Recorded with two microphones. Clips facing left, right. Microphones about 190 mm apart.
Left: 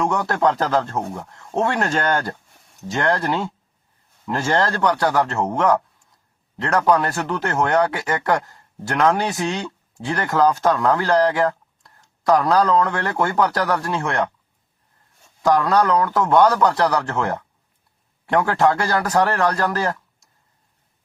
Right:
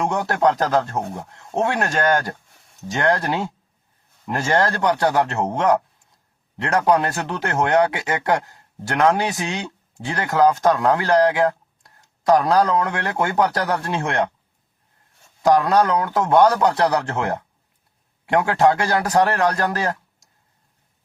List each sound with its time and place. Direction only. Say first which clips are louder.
0.0 s speech: even; 20° right (ahead or behind)
15.4 s speech: right 1 dB; 15° right (ahead or behind)